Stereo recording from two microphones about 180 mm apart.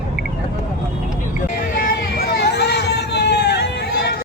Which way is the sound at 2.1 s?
70° left (ahead or behind).